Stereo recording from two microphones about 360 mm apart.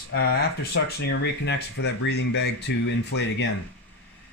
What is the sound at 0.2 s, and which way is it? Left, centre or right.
Speech, left.